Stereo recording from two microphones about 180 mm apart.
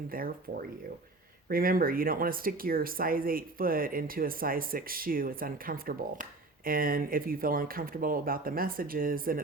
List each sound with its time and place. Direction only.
0.1 s speech: 55° right (ahead or behind)